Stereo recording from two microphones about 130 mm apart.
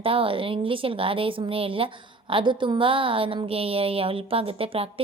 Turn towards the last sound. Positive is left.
turn(degrees=-45)  # may be behind; listen again after turning